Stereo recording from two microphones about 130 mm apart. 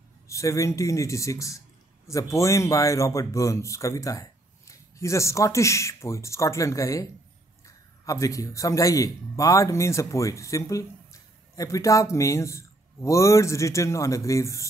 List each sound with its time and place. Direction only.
0.3 s a man's voice: 25° left (ahead or behind)